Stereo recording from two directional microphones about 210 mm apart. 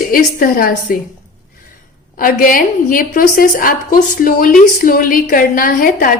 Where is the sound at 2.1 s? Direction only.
40° left (ahead or behind).